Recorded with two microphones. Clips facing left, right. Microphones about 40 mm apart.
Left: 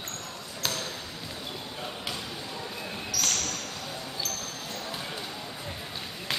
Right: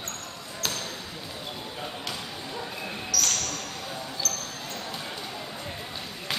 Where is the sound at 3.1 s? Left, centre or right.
Centre.